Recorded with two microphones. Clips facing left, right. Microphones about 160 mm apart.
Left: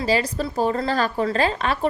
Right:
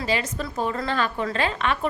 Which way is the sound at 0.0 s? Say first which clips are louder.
Left 4 dB; 35° left (ahead or behind).